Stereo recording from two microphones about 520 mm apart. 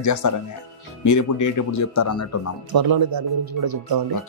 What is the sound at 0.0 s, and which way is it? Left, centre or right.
Speech, left.